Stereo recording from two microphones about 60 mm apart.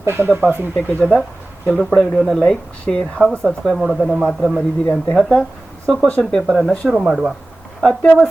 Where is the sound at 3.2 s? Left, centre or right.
Centre.